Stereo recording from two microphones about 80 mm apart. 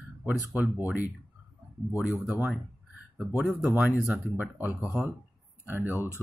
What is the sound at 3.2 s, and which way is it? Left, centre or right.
Speech, centre.